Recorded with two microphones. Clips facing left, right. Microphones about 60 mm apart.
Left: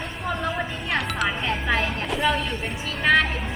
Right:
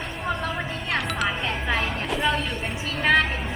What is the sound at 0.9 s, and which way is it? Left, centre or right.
Speech, centre.